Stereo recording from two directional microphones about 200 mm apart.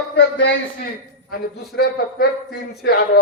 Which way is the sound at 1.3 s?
50° left (ahead or behind).